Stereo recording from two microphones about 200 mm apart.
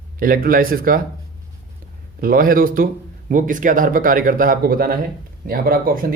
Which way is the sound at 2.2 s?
45° right (ahead or behind).